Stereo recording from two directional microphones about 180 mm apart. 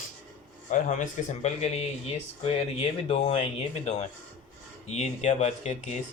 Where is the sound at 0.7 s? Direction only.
40° left (ahead or behind).